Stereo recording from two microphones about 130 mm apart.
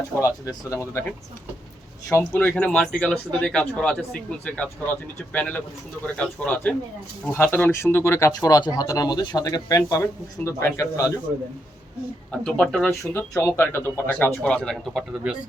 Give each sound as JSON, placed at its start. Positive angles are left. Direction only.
{"t": 0.2, "sound": "speech", "side_deg": 25}
{"t": 2.0, "sound": "speech", "side_deg": 20}
{"t": 12.3, "sound": "speech", "side_deg": 5}
{"t": 12.9, "sound": "speech", "side_deg": 20}